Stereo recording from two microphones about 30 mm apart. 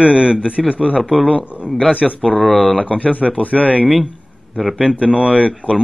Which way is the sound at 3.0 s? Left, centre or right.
Right.